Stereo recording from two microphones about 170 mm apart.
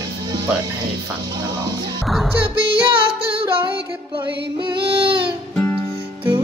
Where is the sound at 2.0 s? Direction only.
Centre (ahead or behind).